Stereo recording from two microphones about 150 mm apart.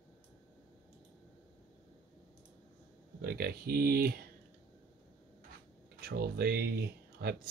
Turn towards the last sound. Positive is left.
turn(degrees=-90)